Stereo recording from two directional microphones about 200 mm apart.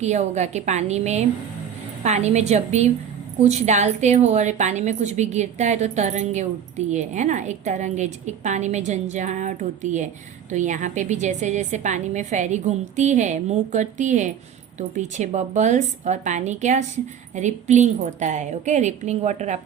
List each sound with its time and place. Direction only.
0.0 s a woman's voice: 35° right (ahead or behind)